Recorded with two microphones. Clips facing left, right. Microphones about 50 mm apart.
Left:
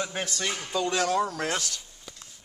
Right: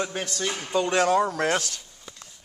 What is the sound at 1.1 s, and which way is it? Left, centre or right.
Speech, centre.